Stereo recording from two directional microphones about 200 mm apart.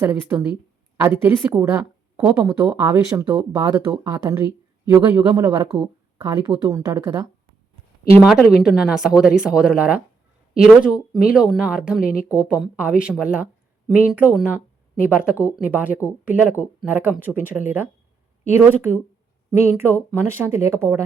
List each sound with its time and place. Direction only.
0.0 s a woman's voice: 10° right (ahead or behind)
6.1 s speech: 15° right (ahead or behind)
8.3 s a woman's voice: centre (ahead or behind)